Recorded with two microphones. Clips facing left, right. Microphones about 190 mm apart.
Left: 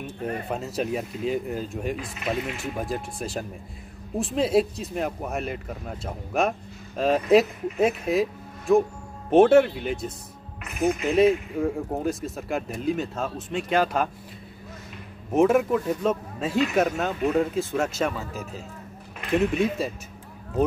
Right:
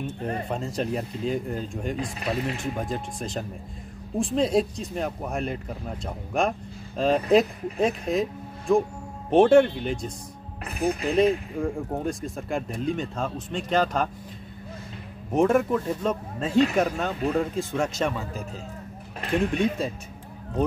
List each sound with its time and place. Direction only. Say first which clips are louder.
0.5 s speech: left 1 dB; 5° left (ahead or behind)
2.0 s speech: right 1 dB; 35° right (ahead or behind)
2.5 s speech: even; 5° left (ahead or behind)
10.6 s speech: left 2 dB; 35° right (ahead or behind)
11.1 s speech: left 2 dB; 5° left (ahead or behind)
15.3 s speech: left 1 dB; 5° left (ahead or behind)